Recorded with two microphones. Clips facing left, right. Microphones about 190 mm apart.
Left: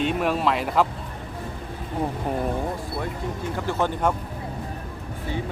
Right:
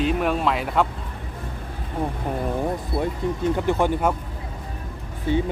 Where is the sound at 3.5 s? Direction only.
20° right (ahead or behind).